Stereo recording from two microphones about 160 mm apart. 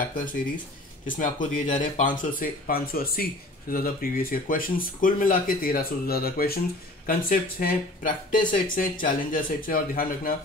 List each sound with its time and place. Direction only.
1.0 s speech: 55° left (ahead or behind)